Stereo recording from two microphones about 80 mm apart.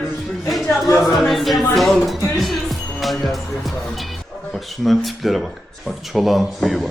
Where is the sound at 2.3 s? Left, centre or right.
Centre.